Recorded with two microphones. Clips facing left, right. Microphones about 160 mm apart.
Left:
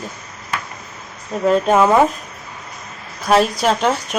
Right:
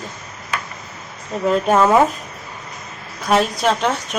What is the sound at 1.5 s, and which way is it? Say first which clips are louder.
Speech: left 1 dB; centre (ahead or behind).